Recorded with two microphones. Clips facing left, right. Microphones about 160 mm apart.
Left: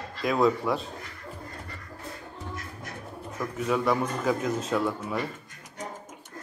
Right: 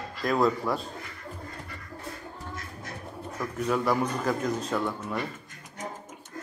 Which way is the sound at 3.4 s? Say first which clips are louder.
Even; centre (ahead or behind).